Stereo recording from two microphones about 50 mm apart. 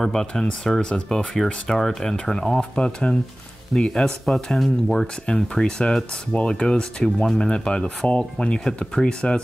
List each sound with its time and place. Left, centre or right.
0.0 s speech: centre
2.8 s speech: left
3.7 s speech: centre
5.0 s speech: centre